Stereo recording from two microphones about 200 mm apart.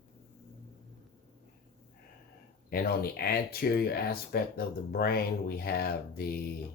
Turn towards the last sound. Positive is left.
turn(degrees=50)  # may be behind; listen again after turning